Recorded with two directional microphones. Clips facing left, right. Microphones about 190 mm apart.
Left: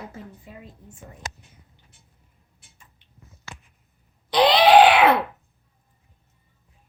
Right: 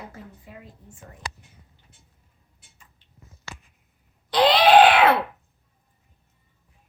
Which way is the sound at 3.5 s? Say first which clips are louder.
Right 1 dB; 90° right.